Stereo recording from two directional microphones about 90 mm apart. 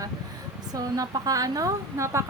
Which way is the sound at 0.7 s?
45° right (ahead or behind).